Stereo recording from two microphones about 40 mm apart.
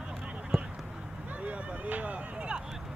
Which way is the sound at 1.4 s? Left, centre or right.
Right.